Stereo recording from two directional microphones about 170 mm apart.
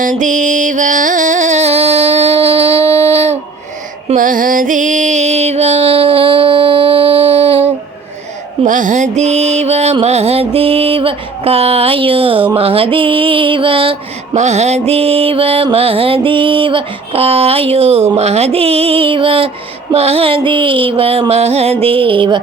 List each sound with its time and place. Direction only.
0.0 s music: 50° right (ahead or behind)
4.1 s music: 50° right (ahead or behind); by 7.7 s 35° right (ahead or behind)
8.6 s music: 50° right (ahead or behind); by 22.4 s 30° right (ahead or behind)